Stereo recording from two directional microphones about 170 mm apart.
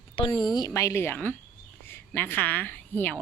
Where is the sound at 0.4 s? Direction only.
25° left (ahead or behind).